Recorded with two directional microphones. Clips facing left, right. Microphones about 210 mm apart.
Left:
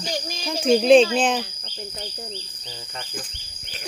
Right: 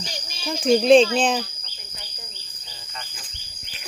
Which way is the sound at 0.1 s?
45° left (ahead or behind).